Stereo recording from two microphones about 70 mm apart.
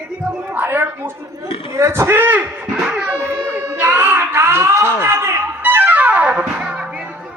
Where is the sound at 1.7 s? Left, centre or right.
Right.